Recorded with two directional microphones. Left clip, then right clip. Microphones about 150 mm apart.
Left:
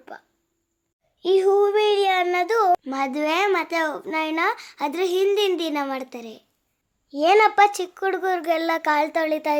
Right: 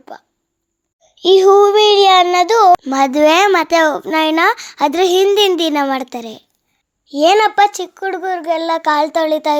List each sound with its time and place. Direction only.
0.1 s child singing: 30° right (ahead or behind)
1.2 s child singing: 40° right (ahead or behind)
2.8 s a child's voice: 55° right (ahead or behind)
7.1 s child singing: 35° right (ahead or behind)
7.3 s a child's voice: 20° right (ahead or behind)